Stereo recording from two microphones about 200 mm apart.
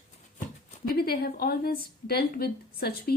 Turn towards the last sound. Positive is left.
turn(degrees=50)  # may be behind; listen again after turning